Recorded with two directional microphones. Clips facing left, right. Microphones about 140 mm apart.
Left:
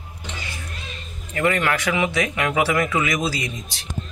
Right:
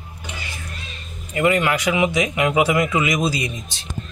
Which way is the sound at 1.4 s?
15° right (ahead or behind).